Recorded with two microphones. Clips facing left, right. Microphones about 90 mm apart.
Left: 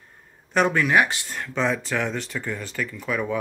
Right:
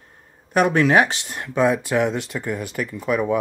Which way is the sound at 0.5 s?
10° right (ahead or behind).